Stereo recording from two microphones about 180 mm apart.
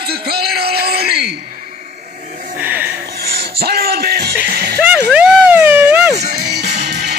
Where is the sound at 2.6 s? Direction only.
10° right (ahead or behind).